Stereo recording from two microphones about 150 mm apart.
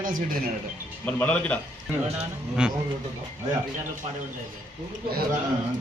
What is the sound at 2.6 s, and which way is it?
Speech, 5° right (ahead or behind).